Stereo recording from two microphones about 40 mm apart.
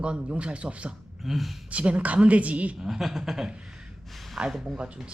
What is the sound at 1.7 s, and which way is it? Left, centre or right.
A woman's voice, right.